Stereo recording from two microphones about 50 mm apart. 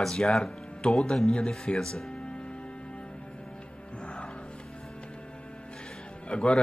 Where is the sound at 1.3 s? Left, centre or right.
Left.